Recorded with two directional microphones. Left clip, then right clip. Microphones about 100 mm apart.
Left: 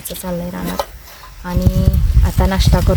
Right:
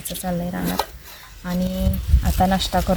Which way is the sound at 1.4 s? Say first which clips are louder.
Left 4 dB; 45° left (ahead or behind).